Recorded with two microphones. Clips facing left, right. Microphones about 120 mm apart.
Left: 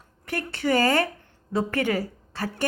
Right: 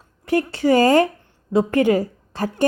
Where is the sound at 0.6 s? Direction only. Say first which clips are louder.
Right 6 dB; 40° right (ahead or behind).